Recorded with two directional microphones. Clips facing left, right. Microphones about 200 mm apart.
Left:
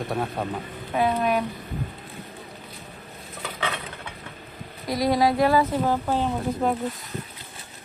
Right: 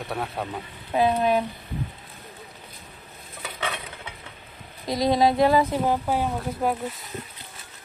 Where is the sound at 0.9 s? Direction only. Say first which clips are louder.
Right 2 dB; 25° right (ahead or behind).